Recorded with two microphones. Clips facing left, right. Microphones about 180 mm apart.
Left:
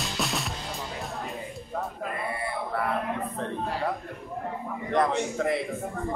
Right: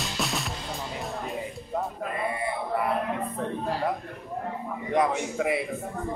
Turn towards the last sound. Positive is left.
turn(degrees=-10)  # may be behind; listen again after turning